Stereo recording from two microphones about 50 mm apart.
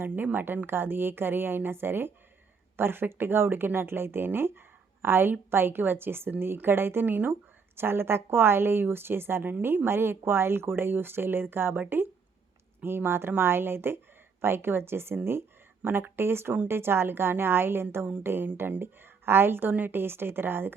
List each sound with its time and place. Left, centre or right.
0.0 s a woman's voice: right